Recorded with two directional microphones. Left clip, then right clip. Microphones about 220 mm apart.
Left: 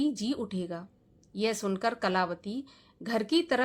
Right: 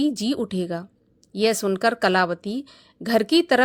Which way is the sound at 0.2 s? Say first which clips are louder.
Right 8 dB; 30° right (ahead or behind).